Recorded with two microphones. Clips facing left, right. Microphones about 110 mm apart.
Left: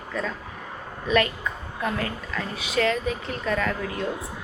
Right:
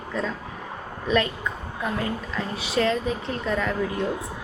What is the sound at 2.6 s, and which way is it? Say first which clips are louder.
Speech: right 1 dB; 30° right (ahead or behind).